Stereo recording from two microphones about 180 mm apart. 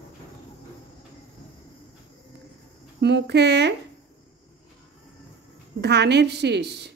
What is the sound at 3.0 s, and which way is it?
Speech, 70° right (ahead or behind).